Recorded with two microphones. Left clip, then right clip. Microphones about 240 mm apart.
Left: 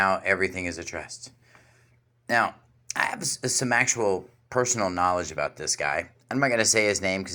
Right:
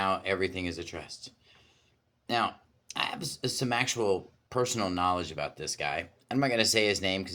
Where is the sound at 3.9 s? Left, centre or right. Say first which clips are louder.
Left 3 dB; centre.